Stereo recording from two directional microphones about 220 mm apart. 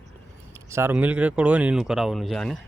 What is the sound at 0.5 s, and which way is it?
Speech, 10° right (ahead or behind).